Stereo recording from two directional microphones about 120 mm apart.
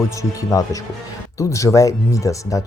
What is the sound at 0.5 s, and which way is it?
Speech, 25° left (ahead or behind).